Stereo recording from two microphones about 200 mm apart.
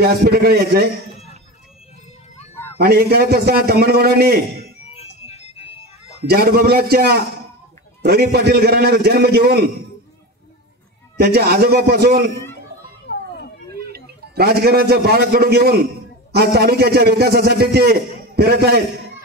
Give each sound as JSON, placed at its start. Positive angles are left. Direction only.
{"t": 0.0, "sound": "a man's voice", "side_deg": -50}
{"t": 2.8, "sound": "a man's voice", "side_deg": -50}
{"t": 4.9, "sound": "music", "side_deg": 30}
{"t": 6.2, "sound": "a man's voice", "side_deg": -50}
{"t": 11.1, "sound": "a man's voice", "side_deg": -50}
{"t": 13.0, "sound": "children playing", "side_deg": 55}
{"t": 13.9, "sound": "a man's voice", "side_deg": -55}